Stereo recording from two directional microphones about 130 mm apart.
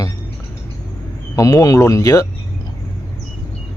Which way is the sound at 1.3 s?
25° left (ahead or behind).